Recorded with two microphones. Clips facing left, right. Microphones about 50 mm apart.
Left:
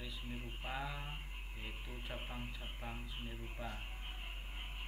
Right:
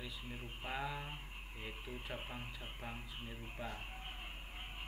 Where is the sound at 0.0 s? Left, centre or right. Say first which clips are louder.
Even; centre.